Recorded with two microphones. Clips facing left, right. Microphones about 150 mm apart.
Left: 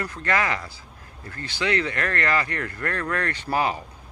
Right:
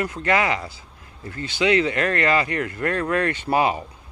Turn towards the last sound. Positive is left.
turn(degrees=-15)  # may be behind; listen again after turning